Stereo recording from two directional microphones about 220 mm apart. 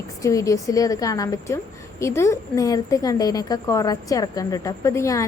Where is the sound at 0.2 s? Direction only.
15° left (ahead or behind).